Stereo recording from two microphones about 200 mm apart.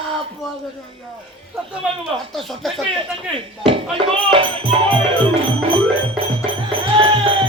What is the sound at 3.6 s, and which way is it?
Music, 25° right (ahead or behind).